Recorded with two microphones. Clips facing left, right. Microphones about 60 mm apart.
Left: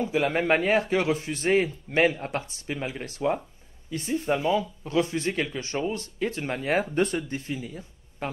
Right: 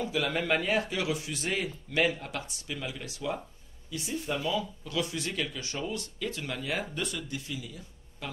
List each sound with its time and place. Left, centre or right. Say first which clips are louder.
0.0 s speech: left 6 dB; left